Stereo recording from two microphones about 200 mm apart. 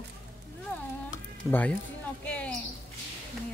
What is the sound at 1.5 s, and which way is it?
Speech, 10° left (ahead or behind).